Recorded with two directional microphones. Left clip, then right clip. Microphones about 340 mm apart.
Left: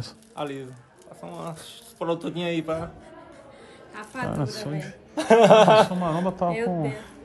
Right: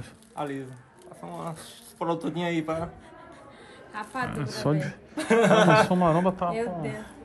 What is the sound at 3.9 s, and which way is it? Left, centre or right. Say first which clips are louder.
Speech: right 1 dB; centre.